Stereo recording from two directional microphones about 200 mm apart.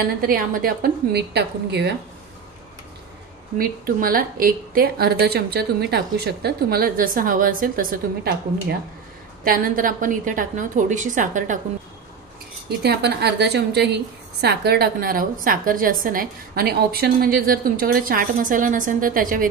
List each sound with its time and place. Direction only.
0.0 s a woman's voice: 45° right (ahead or behind)
3.5 s a woman's voice: 45° right (ahead or behind)
12.6 s a woman's voice: 55° right (ahead or behind)